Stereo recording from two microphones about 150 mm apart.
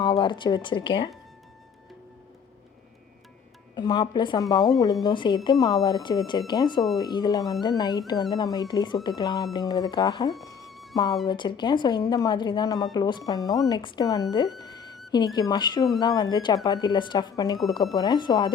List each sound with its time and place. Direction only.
0.0 s speech: 30° left (ahead or behind)
3.8 s a woman's voice: 30° left (ahead or behind)
10.4 s music: 25° left (ahead or behind)
10.7 s music: centre (ahead or behind)
10.9 s a woman's voice: 25° left (ahead or behind)